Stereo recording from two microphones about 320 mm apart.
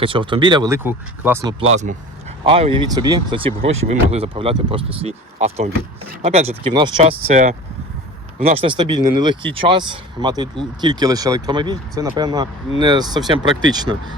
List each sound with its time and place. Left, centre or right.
0.0 s speech: centre
8.4 s speech: centre